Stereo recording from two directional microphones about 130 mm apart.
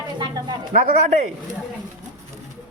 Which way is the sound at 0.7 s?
65° right (ahead or behind).